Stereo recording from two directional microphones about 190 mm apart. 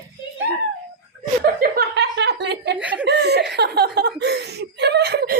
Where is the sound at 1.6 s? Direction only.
55° right (ahead or behind).